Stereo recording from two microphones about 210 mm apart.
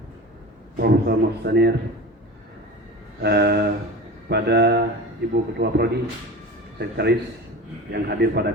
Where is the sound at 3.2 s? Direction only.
50° right (ahead or behind).